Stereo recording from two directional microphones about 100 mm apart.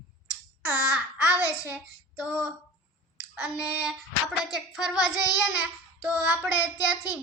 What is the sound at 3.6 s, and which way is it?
A child's voice, 10° right (ahead or behind).